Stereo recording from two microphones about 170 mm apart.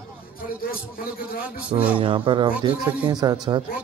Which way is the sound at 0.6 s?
60° left (ahead or behind).